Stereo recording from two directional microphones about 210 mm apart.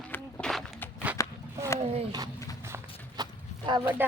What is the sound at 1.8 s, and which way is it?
Speech, 30° right (ahead or behind).